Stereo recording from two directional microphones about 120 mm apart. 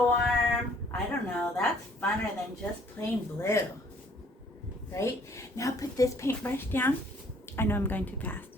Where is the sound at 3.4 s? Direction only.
25° left (ahead or behind).